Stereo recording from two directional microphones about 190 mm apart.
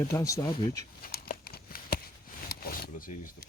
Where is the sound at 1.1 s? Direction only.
55° left (ahead or behind).